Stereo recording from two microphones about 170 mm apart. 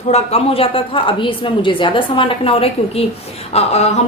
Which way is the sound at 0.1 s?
40° left (ahead or behind).